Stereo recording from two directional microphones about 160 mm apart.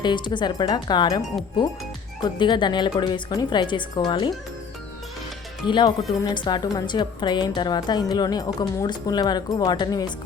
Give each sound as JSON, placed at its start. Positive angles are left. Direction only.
{"t": 0.0, "sound": "a woman's voice", "side_deg": 30}
{"t": 2.2, "sound": "a woman's voice", "side_deg": 30}
{"t": 5.6, "sound": "a woman's voice", "side_deg": 30}